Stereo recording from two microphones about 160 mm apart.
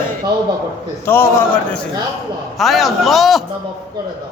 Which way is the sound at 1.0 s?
15° left (ahead or behind).